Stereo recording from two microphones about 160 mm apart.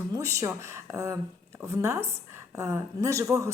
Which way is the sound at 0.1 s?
20° right (ahead or behind).